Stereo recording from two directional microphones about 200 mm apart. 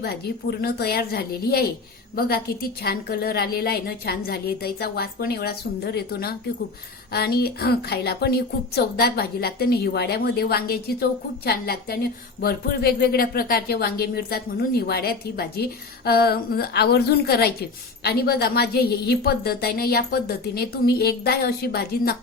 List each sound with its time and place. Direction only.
0.6 s speech: 50° left (ahead or behind)